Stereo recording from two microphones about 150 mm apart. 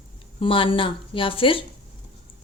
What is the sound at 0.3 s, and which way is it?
Speech, 35° left (ahead or behind).